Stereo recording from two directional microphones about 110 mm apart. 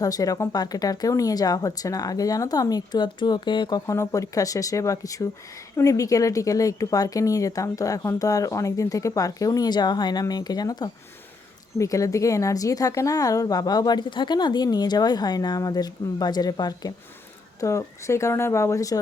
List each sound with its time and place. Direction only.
0.0 s a woman's voice: 35° left (ahead or behind)
3.8 s a woman's voice: 30° left (ahead or behind)